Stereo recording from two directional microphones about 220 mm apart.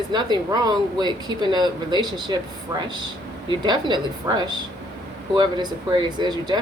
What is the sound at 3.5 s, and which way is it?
Speech, 20° right (ahead or behind).